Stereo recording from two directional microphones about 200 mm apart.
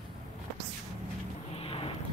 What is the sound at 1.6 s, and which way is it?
Boat, 30° left (ahead or behind).